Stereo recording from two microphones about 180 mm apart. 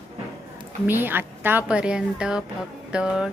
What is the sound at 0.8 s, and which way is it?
A woman's voice, 10° right (ahead or behind).